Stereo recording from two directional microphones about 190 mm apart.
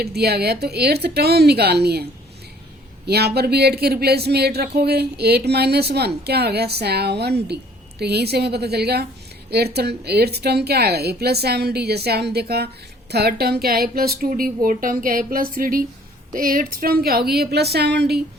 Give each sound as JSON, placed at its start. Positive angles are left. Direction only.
{"t": 0.0, "sound": "a woman's voice", "side_deg": -55}
{"t": 3.1, "sound": "a woman's voice", "side_deg": -55}